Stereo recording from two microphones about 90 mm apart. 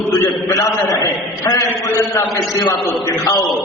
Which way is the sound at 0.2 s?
40° left (ahead or behind).